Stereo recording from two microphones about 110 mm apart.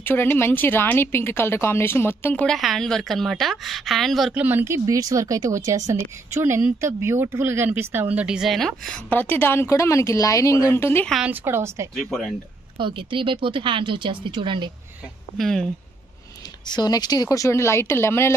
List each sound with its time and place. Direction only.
0.0 s a woman's voice: 20° left (ahead or behind)
2.4 s a woman's voice: centre (ahead or behind)
4.3 s speech: 15° right (ahead or behind); by 9.0 s 5° left (ahead or behind)
9.1 s a woman's voice: 15° left (ahead or behind)
11.2 s speech: 20° right (ahead or behind)
11.9 s a woman's voice: centre (ahead or behind)
12.7 s speech: 50° right (ahead or behind)
15.3 s a woman's voice: 5° left (ahead or behind)
16.6 s a woman's voice: 40° left (ahead or behind); by 18.3 s 25° left (ahead or behind)